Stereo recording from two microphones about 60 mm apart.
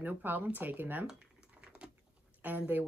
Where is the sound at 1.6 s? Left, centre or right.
Centre.